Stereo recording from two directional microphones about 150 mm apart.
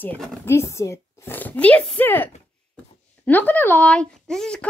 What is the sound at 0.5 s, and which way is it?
A woman's voice, 20° left (ahead or behind).